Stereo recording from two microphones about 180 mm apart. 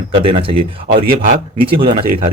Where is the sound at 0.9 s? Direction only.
55° right (ahead or behind).